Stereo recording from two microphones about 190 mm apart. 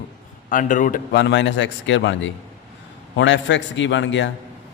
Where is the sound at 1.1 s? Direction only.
65° left (ahead or behind).